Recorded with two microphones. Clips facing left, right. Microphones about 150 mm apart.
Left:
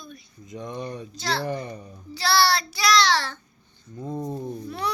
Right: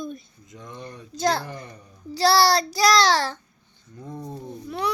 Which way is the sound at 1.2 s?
45° right (ahead or behind).